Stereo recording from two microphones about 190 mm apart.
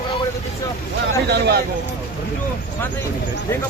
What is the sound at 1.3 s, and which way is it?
Speech, 60° right (ahead or behind).